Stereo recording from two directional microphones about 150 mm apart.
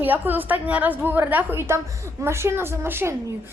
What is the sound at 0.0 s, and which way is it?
A woman's voice, 10° right (ahead or behind).